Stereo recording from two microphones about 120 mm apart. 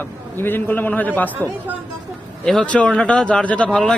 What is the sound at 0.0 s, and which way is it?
Speech, 15° left (ahead or behind).